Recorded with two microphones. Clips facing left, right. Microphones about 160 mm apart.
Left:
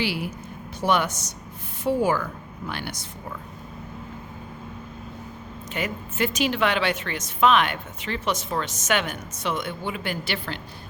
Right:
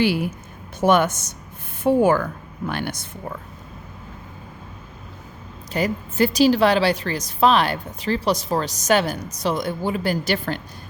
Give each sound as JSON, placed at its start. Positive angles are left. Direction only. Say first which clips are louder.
{"t": 0.8, "sound": "a woman's voice", "louder": "right 6 dB", "side_deg": -50}
{"t": 5.7, "sound": "a woman's voice", "louder": "right 7 dB", "side_deg": -35}